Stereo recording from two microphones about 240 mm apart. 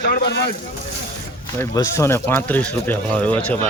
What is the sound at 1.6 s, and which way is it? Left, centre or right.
Speech, centre.